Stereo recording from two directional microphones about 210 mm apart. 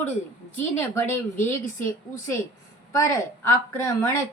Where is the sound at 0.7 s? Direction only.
10° left (ahead or behind).